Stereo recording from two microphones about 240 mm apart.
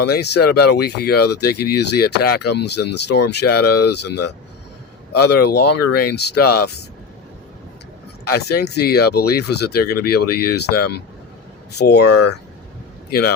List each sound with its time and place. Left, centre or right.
0.0 s speech: left
8.3 s speech: left